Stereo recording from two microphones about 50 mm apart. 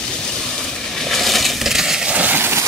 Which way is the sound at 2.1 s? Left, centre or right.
Right.